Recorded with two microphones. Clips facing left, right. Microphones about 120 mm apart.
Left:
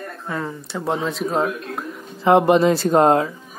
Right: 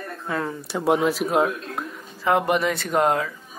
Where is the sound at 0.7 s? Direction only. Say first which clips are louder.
Right 4 dB; 10° right (ahead or behind).